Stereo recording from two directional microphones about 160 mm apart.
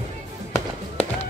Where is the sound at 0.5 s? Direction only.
45° left (ahead or behind).